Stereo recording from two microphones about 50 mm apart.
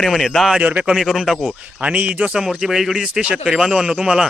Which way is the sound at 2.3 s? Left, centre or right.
Centre.